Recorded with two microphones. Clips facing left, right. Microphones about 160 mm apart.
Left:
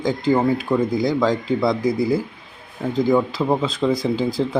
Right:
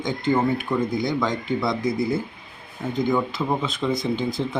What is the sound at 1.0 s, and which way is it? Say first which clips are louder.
Speech: left 5 dB; 30° left (ahead or behind).